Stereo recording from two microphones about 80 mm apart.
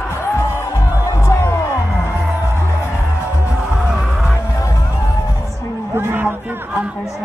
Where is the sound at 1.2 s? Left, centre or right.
Left.